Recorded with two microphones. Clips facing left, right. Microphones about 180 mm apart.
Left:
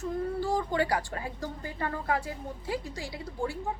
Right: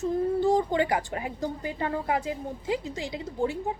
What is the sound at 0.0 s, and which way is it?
A woman's voice, 20° right (ahead or behind).